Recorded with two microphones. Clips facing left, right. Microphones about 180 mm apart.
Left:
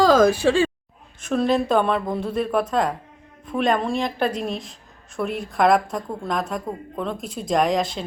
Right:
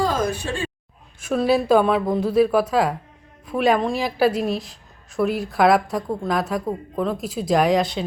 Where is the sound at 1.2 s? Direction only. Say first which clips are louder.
Right 1 dB; 5° right (ahead or behind).